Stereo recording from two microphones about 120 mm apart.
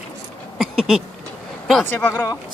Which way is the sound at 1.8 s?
15° left (ahead or behind).